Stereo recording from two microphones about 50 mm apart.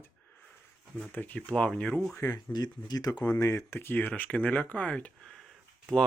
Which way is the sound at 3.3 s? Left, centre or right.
Left.